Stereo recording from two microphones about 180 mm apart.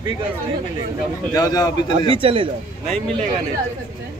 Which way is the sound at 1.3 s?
20° left (ahead or behind).